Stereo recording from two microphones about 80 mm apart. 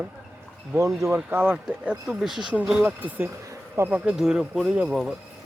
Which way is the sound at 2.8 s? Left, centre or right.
Right.